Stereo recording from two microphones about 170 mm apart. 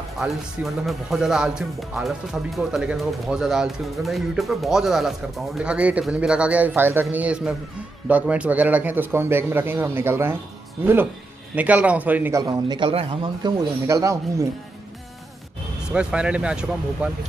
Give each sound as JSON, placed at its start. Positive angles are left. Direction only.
{"t": 0.8, "sound": "speech", "side_deg": 0}
{"t": 11.5, "sound": "a man's voice", "side_deg": -10}
{"t": 15.9, "sound": "speech", "side_deg": -5}